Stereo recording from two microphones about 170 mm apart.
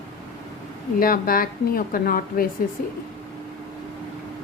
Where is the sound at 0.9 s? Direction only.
55° left (ahead or behind).